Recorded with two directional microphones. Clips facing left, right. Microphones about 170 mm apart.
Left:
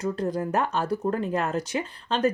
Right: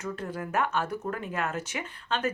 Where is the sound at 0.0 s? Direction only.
35° left (ahead or behind).